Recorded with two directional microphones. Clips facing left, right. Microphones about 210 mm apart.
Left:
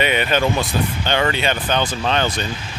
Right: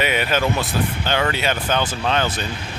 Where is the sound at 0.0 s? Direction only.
5° right (ahead or behind).